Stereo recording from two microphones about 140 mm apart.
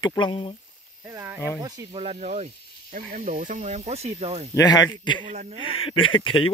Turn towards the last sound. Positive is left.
turn(degrees=40)  # may be behind; listen again after turning